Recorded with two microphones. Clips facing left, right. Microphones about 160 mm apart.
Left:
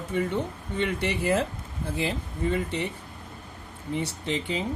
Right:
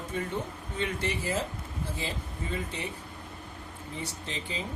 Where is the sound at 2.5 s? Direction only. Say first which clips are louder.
Left 4 dB; 65° left (ahead or behind).